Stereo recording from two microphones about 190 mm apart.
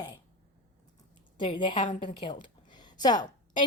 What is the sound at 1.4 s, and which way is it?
Speech, 25° left (ahead or behind).